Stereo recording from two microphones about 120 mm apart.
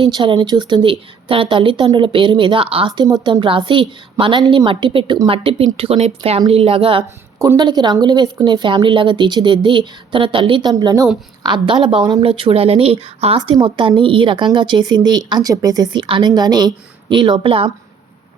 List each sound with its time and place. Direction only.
0.0 s a woman's voice: 45° right (ahead or behind)
7.3 s speech: 30° right (ahead or behind)
10.7 s a woman's voice: 35° right (ahead or behind)
11.4 s a woman's voice: 40° right (ahead or behind)